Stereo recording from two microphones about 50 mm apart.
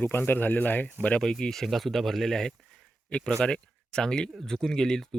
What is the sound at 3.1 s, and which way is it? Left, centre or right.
Speech, left.